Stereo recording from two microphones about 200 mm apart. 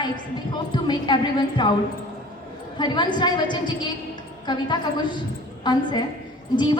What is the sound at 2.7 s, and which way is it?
A woman's voice, 20° left (ahead or behind).